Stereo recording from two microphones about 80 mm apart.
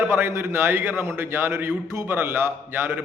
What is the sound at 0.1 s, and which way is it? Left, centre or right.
A man's voice, right.